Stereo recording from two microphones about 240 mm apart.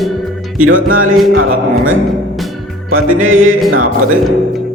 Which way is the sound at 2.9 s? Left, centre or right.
Right.